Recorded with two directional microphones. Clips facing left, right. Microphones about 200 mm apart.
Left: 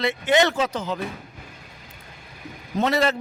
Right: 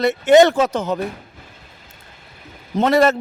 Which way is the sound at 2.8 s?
50° right (ahead or behind).